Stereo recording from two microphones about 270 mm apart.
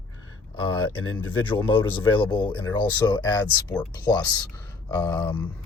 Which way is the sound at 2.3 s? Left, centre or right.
Centre.